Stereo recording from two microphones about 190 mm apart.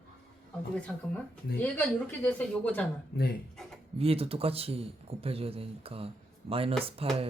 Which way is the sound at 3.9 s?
30° right (ahead or behind).